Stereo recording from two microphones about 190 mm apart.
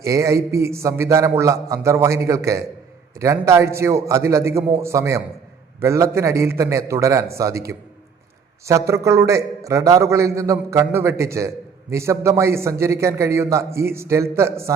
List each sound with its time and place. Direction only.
0.0 s a man's voice: 15° right (ahead or behind)